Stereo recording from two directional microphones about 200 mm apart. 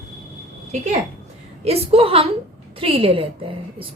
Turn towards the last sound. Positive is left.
turn(degrees=-25)  # may be behind; listen again after turning